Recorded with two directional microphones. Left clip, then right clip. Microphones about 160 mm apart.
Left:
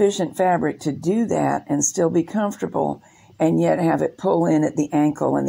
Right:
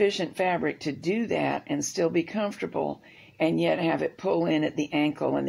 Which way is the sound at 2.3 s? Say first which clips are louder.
Left 5 dB; 15° right (ahead or behind).